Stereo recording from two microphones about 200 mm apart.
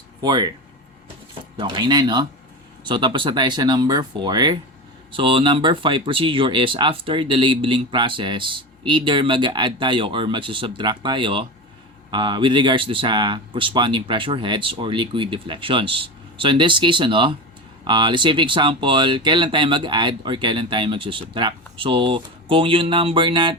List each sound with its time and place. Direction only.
0.2 s speech: 20° right (ahead or behind)
1.5 s speech: 20° right (ahead or behind)